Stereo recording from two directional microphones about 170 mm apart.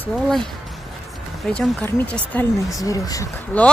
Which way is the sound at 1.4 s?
5° left (ahead or behind).